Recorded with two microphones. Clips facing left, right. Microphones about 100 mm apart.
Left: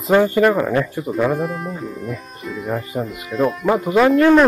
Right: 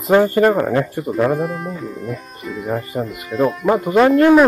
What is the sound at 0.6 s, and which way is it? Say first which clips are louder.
Speech: right 1 dB; 30° right (ahead or behind).